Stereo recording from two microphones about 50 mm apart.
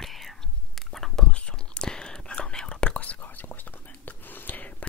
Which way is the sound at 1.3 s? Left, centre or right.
Left.